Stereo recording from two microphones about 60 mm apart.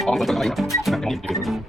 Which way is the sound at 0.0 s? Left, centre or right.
Centre.